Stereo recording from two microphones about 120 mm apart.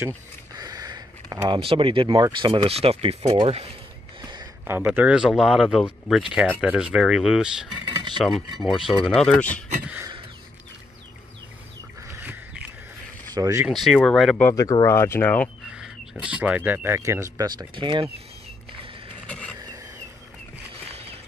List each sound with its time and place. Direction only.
0.6 s a sound: 30° right (ahead or behind)
1.6 s speech: 50° right (ahead or behind)
4.2 s a sound: 40° right (ahead or behind)
4.6 s speech: 15° right (ahead or behind); by 8.8 s centre (ahead or behind)
8.8 s speech: 45° left (ahead or behind)
9.1 s speech: 5° left (ahead or behind)
13.3 s speech: 30° right (ahead or behind)
13.7 s speech: centre (ahead or behind)
14.5 s speech: 30° left (ahead or behind)
15.6 s speech: 5° right (ahead or behind); by 17.5 s 25° right (ahead or behind)
17.5 s speech: 40° right (ahead or behind)
19.2 s a sound: 10° left (ahead or behind)
20.9 s a sound: 55° right (ahead or behind)